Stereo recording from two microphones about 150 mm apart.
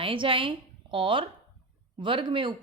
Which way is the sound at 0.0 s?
35° right (ahead or behind).